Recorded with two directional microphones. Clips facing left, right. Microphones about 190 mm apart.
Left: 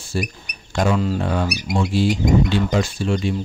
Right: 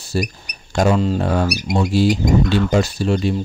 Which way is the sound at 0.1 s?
40° right (ahead or behind).